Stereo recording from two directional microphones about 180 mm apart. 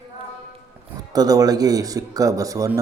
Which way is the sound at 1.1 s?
20° right (ahead or behind).